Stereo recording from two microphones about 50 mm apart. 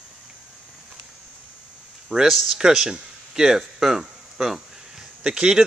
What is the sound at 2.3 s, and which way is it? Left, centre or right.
Speech, centre.